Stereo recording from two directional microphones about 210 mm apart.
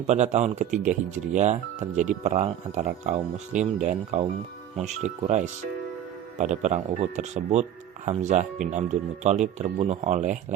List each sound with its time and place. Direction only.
0.1 s speech: 35° right (ahead or behind)